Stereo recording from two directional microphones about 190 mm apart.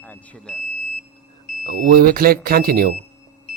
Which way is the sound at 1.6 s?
50° right (ahead or behind).